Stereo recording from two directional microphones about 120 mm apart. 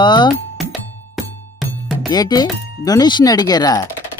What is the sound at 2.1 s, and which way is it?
Speech, 35° left (ahead or behind).